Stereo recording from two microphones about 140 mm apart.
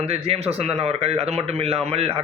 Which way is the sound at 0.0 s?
45° right (ahead or behind).